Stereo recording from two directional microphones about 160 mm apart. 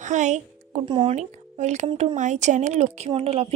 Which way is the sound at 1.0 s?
45° right (ahead or behind).